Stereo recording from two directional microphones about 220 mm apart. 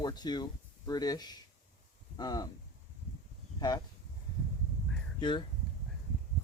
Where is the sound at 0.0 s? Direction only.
20° left (ahead or behind).